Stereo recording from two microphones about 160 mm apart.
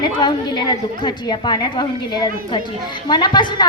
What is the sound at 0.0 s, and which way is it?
A woman's voice, 25° left (ahead or behind).